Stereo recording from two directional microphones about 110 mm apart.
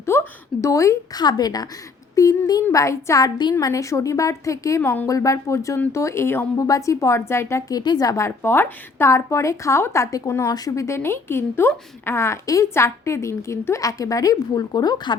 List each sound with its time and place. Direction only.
0.0 s a woman's voice: 25° left (ahead or behind)
4.8 s a woman's voice: 20° left (ahead or behind)
5.0 s a woman's voice: 30° left (ahead or behind)
7.8 s a woman's voice: 35° left (ahead or behind)